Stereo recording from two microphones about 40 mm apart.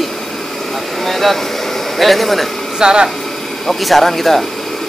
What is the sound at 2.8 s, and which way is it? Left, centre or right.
Speech, centre.